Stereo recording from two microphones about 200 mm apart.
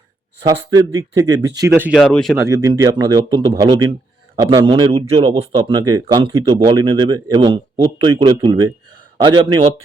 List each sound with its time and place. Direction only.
0.4 s a man's voice: 20° right (ahead or behind); by 2.4 s centre (ahead or behind)
2.4 s a man's voice: 15° right (ahead or behind)